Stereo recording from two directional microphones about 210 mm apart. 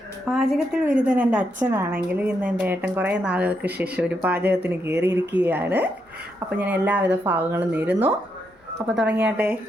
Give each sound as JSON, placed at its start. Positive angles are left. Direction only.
{"t": 0.3, "sound": "a woman's voice", "side_deg": 0}